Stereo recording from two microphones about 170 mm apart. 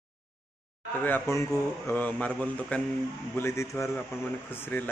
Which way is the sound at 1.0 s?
15° left (ahead or behind).